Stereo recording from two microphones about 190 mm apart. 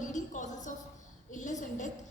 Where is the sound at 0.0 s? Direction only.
40° left (ahead or behind).